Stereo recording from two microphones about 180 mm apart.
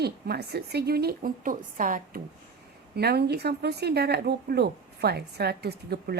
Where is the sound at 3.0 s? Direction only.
65° right (ahead or behind).